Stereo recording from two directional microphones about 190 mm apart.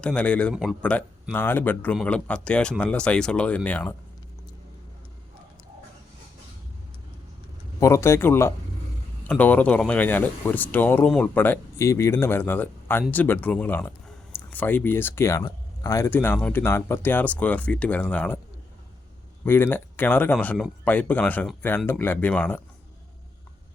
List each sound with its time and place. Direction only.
0.0 s a man's voice: 5° left (ahead or behind)
7.8 s speech: 15° left (ahead or behind)
19.5 s speech: 10° left (ahead or behind)